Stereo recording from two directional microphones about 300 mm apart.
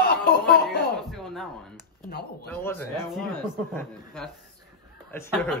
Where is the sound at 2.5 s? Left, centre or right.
Centre.